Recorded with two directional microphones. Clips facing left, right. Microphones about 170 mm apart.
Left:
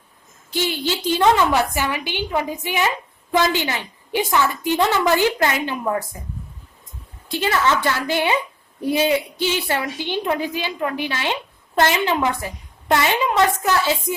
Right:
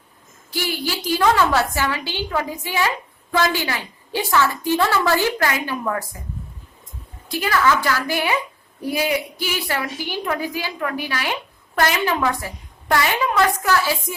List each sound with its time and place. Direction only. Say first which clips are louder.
0.5 s a woman's voice: left 2 dB; 20° left (ahead or behind)
7.3 s a woman's voice: right 1 dB; 25° left (ahead or behind)